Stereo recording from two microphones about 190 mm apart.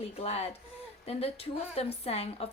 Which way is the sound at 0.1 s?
30° left (ahead or behind).